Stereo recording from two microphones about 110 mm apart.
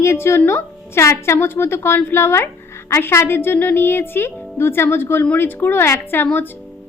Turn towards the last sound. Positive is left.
turn(degrees=20)  # may be behind; listen again after turning